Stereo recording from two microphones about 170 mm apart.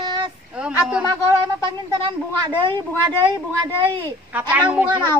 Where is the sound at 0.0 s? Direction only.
25° right (ahead or behind).